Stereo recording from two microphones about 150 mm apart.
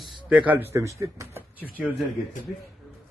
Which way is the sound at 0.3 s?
10° right (ahead or behind).